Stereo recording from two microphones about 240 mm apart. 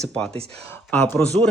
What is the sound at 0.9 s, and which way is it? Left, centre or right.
Speech, centre.